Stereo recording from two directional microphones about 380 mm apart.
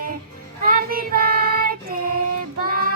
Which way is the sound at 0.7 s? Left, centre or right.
Right.